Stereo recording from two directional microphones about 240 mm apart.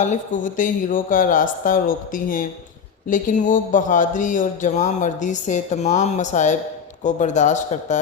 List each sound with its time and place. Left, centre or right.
0.0 s speech: left